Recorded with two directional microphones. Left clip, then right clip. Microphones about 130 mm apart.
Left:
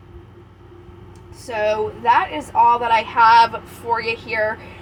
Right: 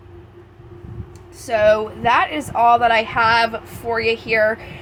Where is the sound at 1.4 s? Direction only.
45° right (ahead or behind).